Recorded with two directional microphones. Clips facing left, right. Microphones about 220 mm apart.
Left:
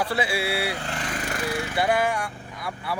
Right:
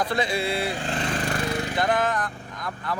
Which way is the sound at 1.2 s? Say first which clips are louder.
Right 3 dB; 35° right (ahead or behind).